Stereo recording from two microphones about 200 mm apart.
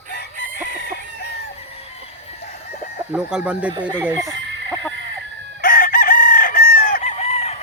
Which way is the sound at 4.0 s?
10° right (ahead or behind).